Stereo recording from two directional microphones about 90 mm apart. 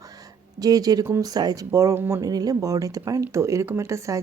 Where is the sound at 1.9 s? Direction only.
25° right (ahead or behind).